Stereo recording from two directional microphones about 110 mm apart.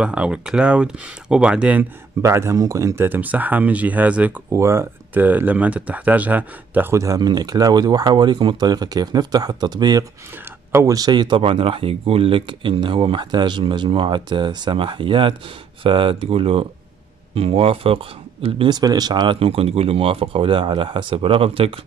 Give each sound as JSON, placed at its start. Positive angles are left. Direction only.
{"t": 0.0, "sound": "speech", "side_deg": -10}
{"t": 2.2, "sound": "speech", "side_deg": -25}
{"t": 4.5, "sound": "speech", "side_deg": -25}
{"t": 7.2, "sound": "speech", "side_deg": -40}
{"t": 10.7, "sound": "speech", "side_deg": -25}
{"t": 11.0, "sound": "speech", "side_deg": -40}
{"t": 18.7, "sound": "speech", "side_deg": -40}